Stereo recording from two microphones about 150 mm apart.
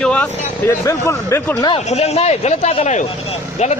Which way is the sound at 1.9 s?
45° left (ahead or behind).